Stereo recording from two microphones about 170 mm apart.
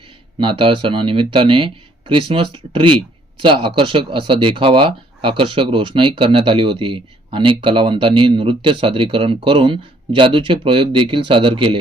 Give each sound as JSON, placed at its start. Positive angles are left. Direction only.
{"t": 0.3, "sound": "speech", "side_deg": -30}